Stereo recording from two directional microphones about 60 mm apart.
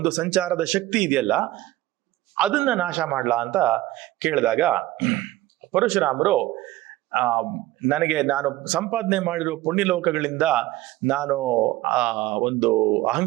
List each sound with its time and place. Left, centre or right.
0.0 s a man's voice: centre